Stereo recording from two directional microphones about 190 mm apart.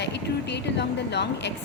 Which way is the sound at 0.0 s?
65° left (ahead or behind).